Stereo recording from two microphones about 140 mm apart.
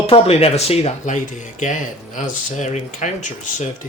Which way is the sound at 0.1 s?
45° left (ahead or behind).